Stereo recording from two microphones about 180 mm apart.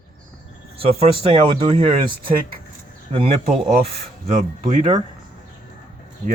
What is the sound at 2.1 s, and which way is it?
Speech, 55° right (ahead or behind).